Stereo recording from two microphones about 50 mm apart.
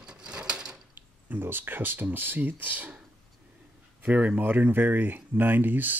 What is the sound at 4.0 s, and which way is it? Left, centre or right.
Speech, right.